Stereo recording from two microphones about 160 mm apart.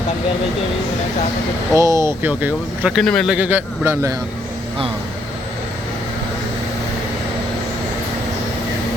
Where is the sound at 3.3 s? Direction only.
10° right (ahead or behind).